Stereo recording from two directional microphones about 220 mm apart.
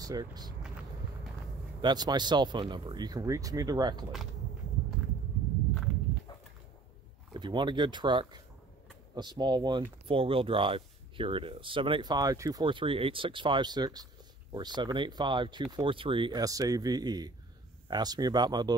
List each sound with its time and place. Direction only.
0.0 s speech: 15° right (ahead or behind)
1.8 s speech: 20° right (ahead or behind)
7.3 s speech: 20° right (ahead or behind)